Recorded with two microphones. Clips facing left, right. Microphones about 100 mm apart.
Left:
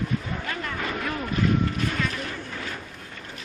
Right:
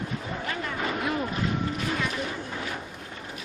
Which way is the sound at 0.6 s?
20° right (ahead or behind).